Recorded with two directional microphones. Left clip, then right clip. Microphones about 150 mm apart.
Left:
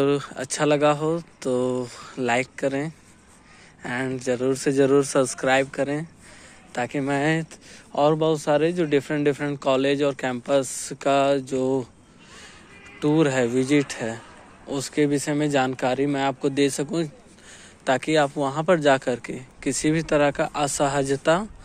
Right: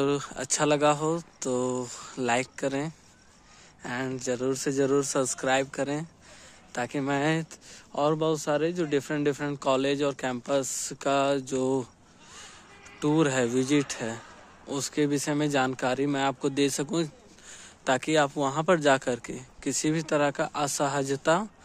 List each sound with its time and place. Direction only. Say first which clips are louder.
0.0 s speech: left 5 dB; 25° right (ahead or behind)
13.0 s speech: left 4 dB; 35° right (ahead or behind)